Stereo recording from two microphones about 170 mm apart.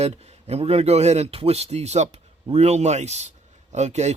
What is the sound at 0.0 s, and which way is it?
Speech, 35° right (ahead or behind).